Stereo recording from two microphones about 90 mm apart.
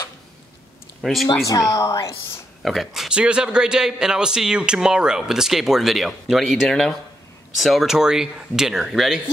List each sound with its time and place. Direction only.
1.0 s a man's voice: centre (ahead or behind)
1.4 s speech: 40° left (ahead or behind)
2.6 s a man's voice: centre (ahead or behind)